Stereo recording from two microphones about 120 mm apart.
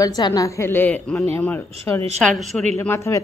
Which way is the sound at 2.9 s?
25° left (ahead or behind).